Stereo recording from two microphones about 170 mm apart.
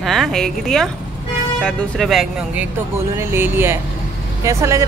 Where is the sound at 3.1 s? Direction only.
15° right (ahead or behind).